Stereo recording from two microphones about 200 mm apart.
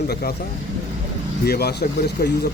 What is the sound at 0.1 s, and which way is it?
Speech, 50° left (ahead or behind).